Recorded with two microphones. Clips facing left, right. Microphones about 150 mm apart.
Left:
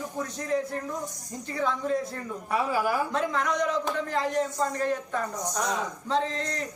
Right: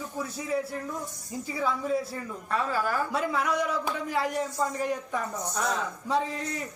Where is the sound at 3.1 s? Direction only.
5° right (ahead or behind).